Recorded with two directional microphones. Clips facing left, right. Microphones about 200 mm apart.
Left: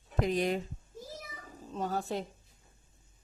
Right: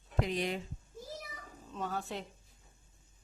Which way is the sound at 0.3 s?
45° left (ahead or behind).